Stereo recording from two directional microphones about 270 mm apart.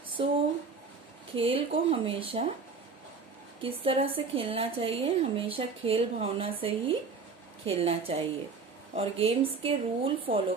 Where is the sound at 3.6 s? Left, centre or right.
Right.